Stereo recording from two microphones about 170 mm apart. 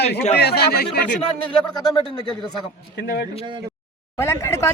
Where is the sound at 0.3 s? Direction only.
70° left (ahead or behind).